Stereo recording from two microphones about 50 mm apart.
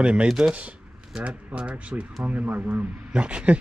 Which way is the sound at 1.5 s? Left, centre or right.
Right.